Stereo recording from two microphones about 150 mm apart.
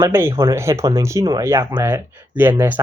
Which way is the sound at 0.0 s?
15° right (ahead or behind).